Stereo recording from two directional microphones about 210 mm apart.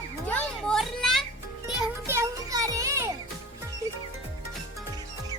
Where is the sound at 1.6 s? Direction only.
10° right (ahead or behind).